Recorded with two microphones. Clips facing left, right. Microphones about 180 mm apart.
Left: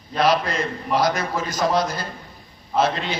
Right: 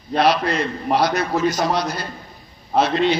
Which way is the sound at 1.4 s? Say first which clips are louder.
Even; 50° left (ahead or behind).